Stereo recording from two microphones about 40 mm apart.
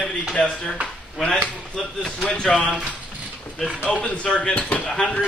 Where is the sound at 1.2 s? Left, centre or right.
Centre.